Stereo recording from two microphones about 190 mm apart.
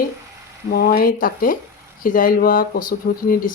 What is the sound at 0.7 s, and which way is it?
Speech, 50° left (ahead or behind).